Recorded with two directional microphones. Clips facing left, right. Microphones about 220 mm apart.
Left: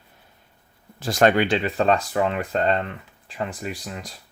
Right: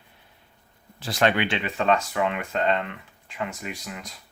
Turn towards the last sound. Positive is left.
turn(degrees=35)  # may be behind; listen again after turning